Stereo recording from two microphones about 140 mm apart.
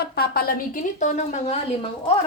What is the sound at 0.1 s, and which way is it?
A woman's voice, 90° left.